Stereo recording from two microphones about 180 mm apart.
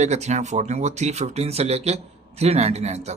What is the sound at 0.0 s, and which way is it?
Speech, 40° right (ahead or behind).